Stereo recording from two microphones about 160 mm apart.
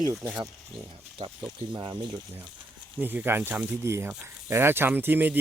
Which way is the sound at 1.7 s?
25° right (ahead or behind).